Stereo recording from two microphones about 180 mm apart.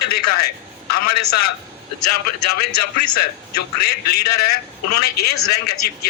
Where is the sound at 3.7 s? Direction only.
60° left (ahead or behind).